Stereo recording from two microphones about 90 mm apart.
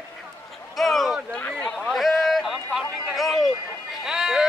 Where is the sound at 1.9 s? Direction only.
Centre (ahead or behind).